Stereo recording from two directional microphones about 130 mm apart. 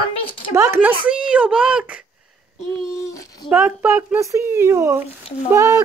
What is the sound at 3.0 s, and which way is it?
Dog, 25° left (ahead or behind).